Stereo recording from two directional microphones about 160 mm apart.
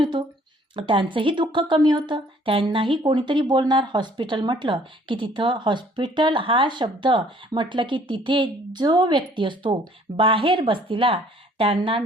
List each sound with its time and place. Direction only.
0.0 s speech: 30° right (ahead or behind)